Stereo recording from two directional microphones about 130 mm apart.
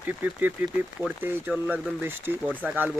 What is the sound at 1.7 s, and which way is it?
Speech, 15° right (ahead or behind).